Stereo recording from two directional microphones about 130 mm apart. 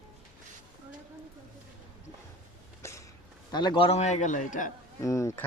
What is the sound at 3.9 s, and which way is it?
Speech, 60° left (ahead or behind).